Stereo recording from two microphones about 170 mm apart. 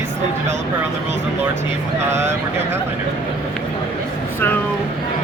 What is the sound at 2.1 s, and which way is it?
Speech, 15° right (ahead or behind).